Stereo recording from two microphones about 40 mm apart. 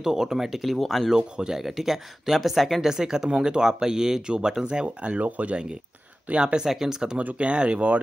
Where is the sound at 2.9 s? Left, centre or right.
Centre; by 5.6 s right.